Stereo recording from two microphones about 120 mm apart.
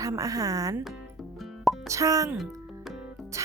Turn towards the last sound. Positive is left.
turn(degrees=-25)  # may be behind; listen again after turning